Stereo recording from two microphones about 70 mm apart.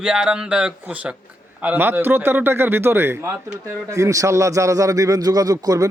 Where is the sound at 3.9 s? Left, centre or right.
Right.